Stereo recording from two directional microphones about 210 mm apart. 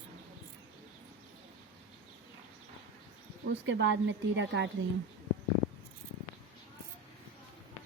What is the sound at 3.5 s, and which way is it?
A woman's voice, 60° right (ahead or behind).